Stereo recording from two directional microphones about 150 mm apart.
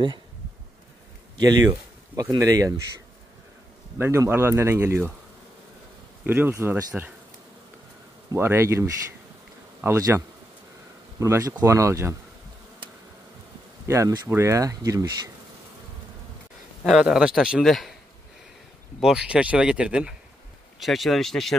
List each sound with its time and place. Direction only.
1.4 s speech: 25° right (ahead or behind)
1.7 s speech: 15° right (ahead or behind)
4.0 s speech: 15° right (ahead or behind)
6.2 s speech: 15° right (ahead or behind)
8.3 s speech: 15° right (ahead or behind)
13.8 s speech: 20° right (ahead or behind)
16.8 s a man's voice: centre (ahead or behind)
18.9 s a man's voice: 5° right (ahead or behind)